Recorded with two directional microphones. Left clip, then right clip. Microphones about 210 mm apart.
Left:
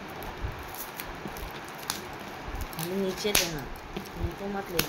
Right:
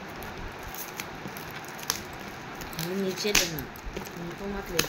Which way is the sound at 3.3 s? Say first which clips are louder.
Right 2 dB; 40° left (ahead or behind).